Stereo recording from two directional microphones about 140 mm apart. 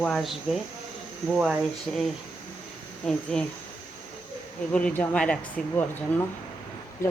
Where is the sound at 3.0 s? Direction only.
5° left (ahead or behind).